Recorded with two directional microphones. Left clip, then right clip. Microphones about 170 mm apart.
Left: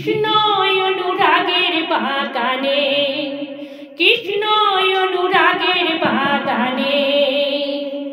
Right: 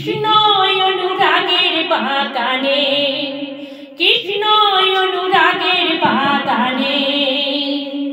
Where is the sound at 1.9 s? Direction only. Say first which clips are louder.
Right 2 dB; 20° left (ahead or behind).